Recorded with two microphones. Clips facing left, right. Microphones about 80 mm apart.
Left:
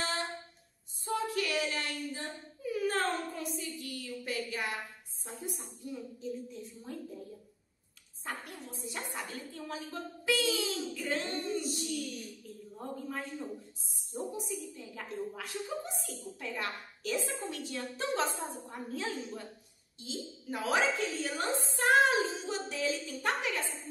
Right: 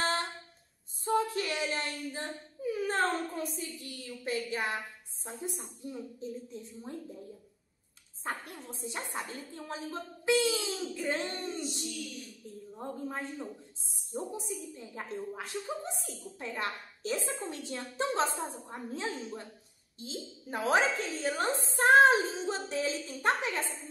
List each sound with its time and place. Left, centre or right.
1.0 s a sound: right
3.8 s a woman's voice: right
8.2 s a woman's voice: right
12.7 s a woman's voice: right